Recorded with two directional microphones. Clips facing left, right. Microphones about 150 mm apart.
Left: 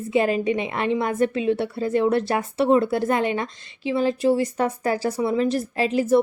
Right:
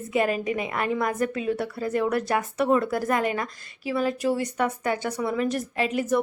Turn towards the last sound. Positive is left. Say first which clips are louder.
# left 5 dB
turn(degrees=30)  # may be behind; listen again after turning